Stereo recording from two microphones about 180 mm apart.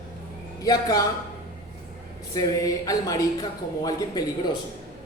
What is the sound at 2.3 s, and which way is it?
Speech, 20° left (ahead or behind).